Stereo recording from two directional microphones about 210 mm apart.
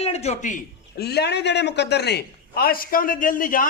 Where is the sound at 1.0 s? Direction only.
50° left (ahead or behind).